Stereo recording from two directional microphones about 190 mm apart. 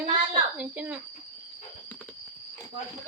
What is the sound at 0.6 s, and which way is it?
Speech, 5° right (ahead or behind).